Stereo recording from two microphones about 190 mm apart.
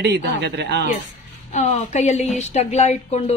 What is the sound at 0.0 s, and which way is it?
Speech, 60° right (ahead or behind).